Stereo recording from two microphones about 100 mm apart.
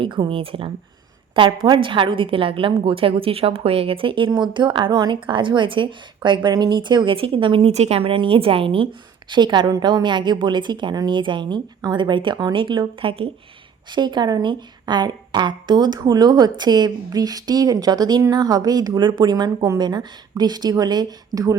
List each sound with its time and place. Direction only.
0.0 s a woman's voice: 55° right (ahead or behind)
1.6 s a woman's voice: 50° right (ahead or behind)
13.9 s speech: 50° right (ahead or behind)